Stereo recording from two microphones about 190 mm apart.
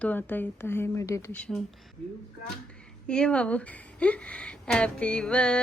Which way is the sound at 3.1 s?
5° left (ahead or behind).